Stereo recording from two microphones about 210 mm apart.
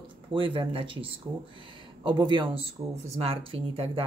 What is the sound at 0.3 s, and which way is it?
Speech, 25° right (ahead or behind).